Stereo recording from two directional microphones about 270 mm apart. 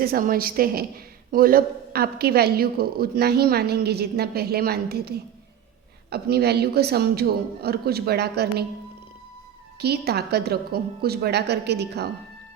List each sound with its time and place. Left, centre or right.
0.0 s a woman's voice: right
9.7 s a woman's voice: right